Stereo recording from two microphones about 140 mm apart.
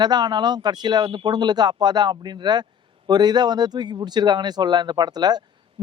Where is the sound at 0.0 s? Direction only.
30° right (ahead or behind).